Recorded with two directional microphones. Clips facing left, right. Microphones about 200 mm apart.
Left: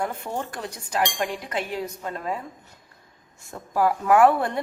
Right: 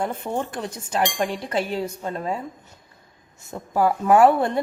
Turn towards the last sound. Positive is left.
turn(degrees=-25)  # may be behind; listen again after turning